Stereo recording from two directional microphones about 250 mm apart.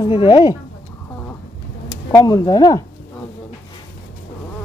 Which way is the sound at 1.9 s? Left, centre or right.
Centre.